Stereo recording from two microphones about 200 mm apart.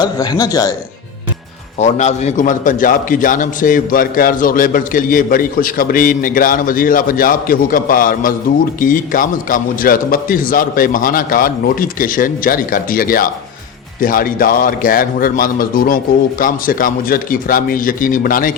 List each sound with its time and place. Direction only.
0.0 s a man's voice: 20° left (ahead or behind)
1.8 s a man's voice: 35° left (ahead or behind)